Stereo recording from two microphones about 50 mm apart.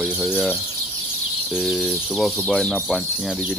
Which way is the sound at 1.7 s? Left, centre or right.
Centre.